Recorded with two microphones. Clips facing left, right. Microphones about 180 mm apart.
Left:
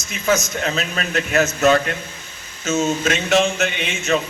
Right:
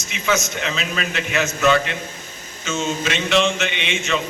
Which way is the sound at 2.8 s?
45° left (ahead or behind).